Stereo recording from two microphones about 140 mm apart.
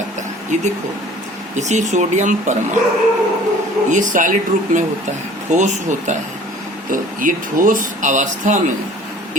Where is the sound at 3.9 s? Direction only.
65° right (ahead or behind).